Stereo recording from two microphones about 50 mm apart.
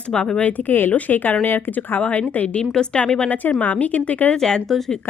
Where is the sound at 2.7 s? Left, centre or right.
Centre.